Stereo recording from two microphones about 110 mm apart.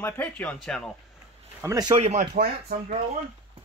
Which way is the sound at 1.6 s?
35° right (ahead or behind).